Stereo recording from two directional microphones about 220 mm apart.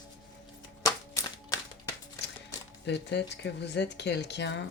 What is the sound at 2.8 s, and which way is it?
Speech, 50° left (ahead or behind).